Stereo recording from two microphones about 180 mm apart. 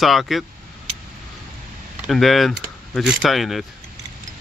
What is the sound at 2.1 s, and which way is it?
Speech, centre (ahead or behind).